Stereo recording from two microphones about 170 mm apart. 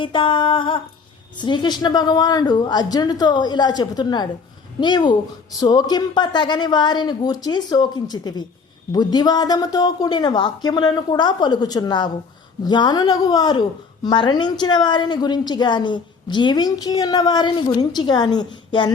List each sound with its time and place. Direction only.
0.0 s a woman's voice: 30° left (ahead or behind)